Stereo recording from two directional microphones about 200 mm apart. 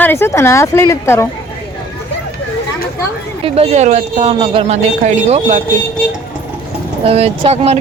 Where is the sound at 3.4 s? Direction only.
30° right (ahead or behind).